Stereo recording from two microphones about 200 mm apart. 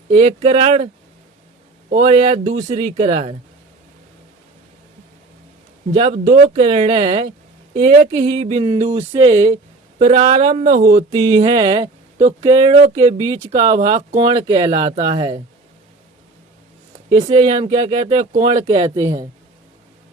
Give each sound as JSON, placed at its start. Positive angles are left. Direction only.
{"t": 0.1, "sound": "speech", "side_deg": -25}
{"t": 2.0, "sound": "speech", "side_deg": -25}
{"t": 5.9, "sound": "a sound", "side_deg": -30}
{"t": 11.1, "sound": "speech", "side_deg": -20}
{"t": 12.5, "sound": "a sound", "side_deg": -30}
{"t": 13.7, "sound": "speech", "side_deg": -35}
{"t": 17.1, "sound": "speech", "side_deg": -30}
{"t": 17.9, "sound": "a sound", "side_deg": -30}
{"t": 18.7, "sound": "speech", "side_deg": -25}